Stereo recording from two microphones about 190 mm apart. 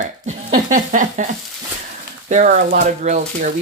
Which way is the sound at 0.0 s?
40° right (ahead or behind).